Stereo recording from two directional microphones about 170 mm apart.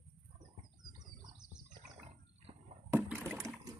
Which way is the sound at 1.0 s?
25° right (ahead or behind).